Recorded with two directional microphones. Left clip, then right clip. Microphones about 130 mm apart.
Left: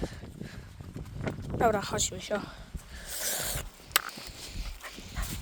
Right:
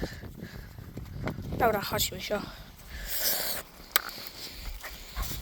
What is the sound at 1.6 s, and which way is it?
Speech, 15° left (ahead or behind).